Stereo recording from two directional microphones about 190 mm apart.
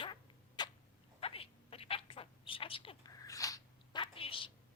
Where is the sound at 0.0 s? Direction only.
25° left (ahead or behind).